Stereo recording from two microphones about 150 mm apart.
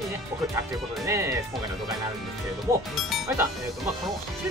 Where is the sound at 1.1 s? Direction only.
20° right (ahead or behind).